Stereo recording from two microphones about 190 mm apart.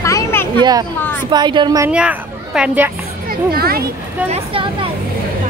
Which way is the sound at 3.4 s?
55° right (ahead or behind).